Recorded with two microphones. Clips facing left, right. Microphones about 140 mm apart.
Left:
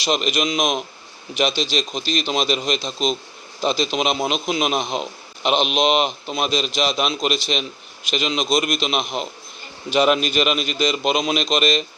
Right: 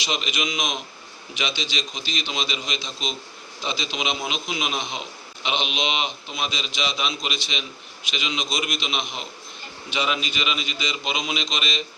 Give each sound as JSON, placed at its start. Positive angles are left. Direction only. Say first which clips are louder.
{"t": 0.0, "sound": "a man's voice", "louder": "left 7 dB", "side_deg": 40}